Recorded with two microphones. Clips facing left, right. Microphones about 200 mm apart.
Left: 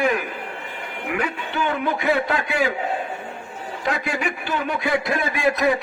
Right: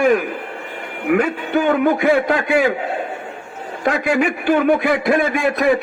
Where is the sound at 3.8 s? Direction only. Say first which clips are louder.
Right 8 dB; 55° right (ahead or behind).